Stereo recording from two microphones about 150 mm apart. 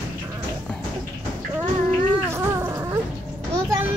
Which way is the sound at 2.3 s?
20° right (ahead or behind).